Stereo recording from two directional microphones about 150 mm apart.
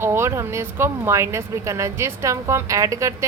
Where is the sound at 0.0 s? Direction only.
15° right (ahead or behind).